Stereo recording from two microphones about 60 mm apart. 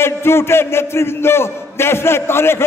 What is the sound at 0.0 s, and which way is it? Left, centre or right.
A man's voice, left.